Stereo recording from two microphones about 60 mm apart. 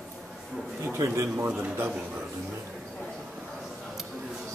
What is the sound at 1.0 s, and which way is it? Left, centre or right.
Speech, right.